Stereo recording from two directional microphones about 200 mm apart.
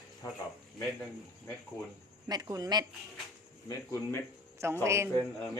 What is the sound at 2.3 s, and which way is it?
Speech, 20° right (ahead or behind).